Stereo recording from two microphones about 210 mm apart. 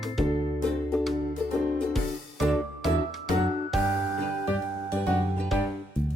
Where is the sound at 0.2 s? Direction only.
Centre (ahead or behind).